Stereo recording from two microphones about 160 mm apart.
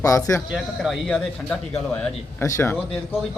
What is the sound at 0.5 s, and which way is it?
A man's voice, centre (ahead or behind).